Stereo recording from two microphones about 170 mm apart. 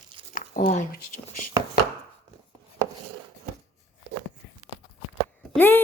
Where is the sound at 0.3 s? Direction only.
50° left (ahead or behind).